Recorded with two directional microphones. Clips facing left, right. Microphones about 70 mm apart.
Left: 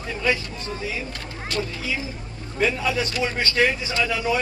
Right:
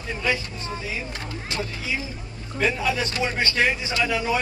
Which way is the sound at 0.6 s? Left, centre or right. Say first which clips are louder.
Left 3 dB; right.